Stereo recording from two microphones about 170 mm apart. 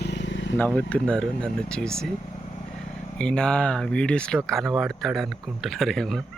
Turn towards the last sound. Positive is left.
turn(degrees=0)  # may be behind; listen again after turning